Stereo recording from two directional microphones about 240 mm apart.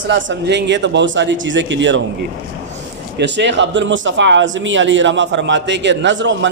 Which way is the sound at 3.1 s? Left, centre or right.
Right.